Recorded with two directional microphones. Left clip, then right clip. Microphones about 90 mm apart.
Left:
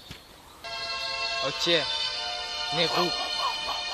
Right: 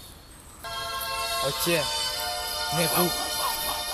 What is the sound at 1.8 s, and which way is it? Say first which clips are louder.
Music: right 1 dB; 35° right (ahead or behind).